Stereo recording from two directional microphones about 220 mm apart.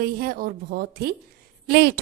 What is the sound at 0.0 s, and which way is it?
A woman's voice, 40° right (ahead or behind).